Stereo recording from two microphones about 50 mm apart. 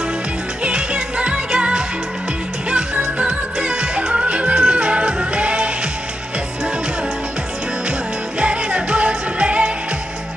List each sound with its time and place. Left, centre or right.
0.7 s music: centre
8.4 s music: right